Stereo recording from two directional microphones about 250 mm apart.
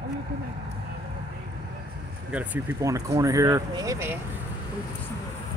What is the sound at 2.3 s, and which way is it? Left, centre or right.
Speech, centre.